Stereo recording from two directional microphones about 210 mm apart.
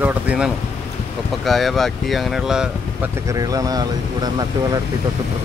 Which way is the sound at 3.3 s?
15° right (ahead or behind).